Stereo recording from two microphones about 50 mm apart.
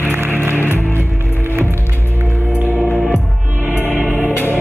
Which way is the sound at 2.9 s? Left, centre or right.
Left.